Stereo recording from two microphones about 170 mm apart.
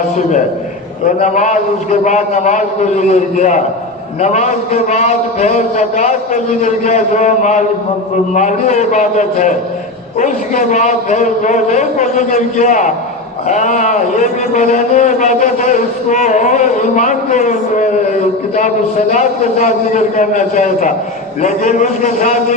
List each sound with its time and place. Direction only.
1.0 s a man's voice: 45° left (ahead or behind)